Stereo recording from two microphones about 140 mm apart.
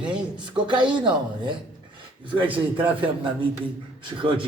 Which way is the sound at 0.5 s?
35° right (ahead or behind).